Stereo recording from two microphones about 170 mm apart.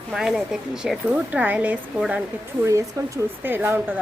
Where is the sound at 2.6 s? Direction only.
20° right (ahead or behind).